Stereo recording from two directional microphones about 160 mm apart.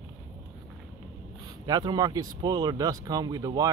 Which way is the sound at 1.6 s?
25° right (ahead or behind).